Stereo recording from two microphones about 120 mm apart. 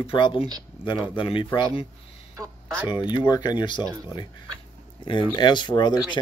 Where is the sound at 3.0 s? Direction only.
35° left (ahead or behind).